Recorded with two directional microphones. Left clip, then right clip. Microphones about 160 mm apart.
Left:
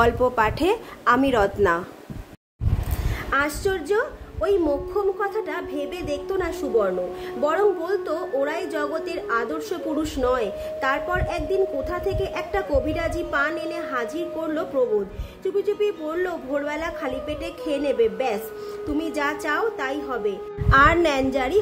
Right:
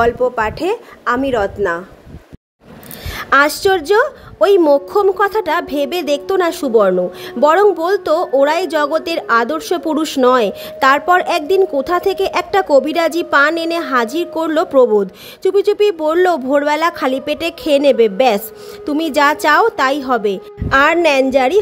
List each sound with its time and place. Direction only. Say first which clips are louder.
0.0 s a woman's voice: right 5 dB; 25° right (ahead or behind)
3.2 s a woman's voice: right 12 dB; 65° right (ahead or behind)
20.7 s a woman's voice: right 6 dB; 40° right (ahead or behind)